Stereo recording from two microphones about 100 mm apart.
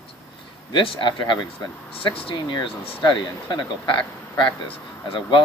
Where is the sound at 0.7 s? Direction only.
55° left (ahead or behind).